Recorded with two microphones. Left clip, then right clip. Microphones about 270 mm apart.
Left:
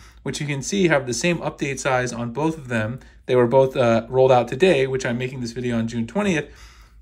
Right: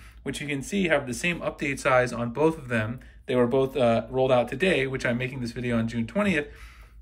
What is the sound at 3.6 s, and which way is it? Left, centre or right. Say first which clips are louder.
Speech: left 5 dB; left.